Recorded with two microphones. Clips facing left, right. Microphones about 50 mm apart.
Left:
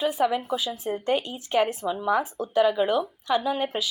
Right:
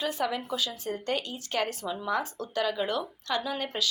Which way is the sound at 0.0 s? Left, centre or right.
Centre.